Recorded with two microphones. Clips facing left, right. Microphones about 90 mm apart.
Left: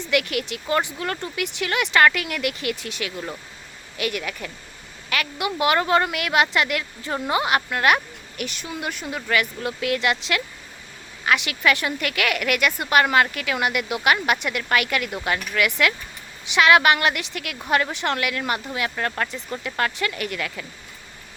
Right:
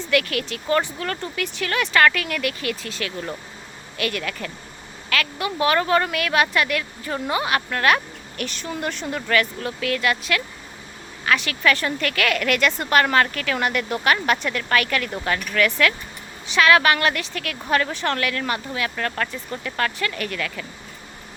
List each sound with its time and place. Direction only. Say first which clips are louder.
0.0 s a woman's voice: right 1 dB; 20° left (ahead or behind)